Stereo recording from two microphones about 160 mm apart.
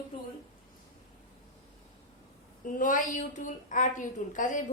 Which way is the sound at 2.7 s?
55° left (ahead or behind).